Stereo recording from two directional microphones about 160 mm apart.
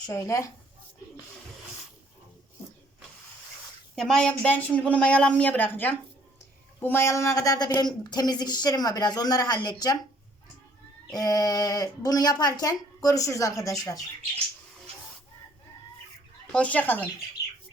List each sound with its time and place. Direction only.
0.0 s speech: 20° left (ahead or behind)
3.9 s speech: 5° left (ahead or behind); by 10.0 s 25° left (ahead or behind)
11.1 s speech: 25° left (ahead or behind)
16.5 s speech: 10° left (ahead or behind)